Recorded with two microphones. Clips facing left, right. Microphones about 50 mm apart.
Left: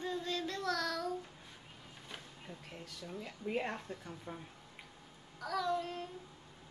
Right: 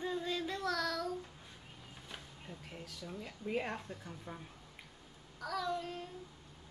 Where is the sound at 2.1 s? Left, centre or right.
Centre.